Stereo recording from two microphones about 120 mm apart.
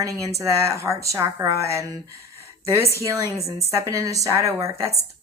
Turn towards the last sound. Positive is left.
turn(degrees=-25)  # may be behind; listen again after turning